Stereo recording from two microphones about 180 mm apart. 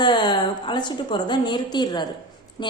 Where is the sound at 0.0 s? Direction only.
25° left (ahead or behind).